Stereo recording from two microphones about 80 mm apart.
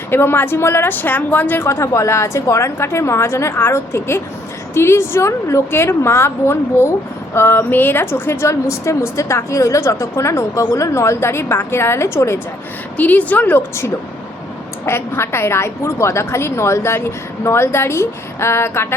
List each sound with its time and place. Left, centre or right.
0.1 s speech: left
1.6 s a woman's voice: left
13.0 s speech: centre
14.8 s a woman's voice: left